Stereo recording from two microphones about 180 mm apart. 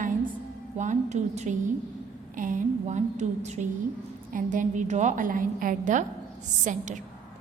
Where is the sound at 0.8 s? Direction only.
40° right (ahead or behind).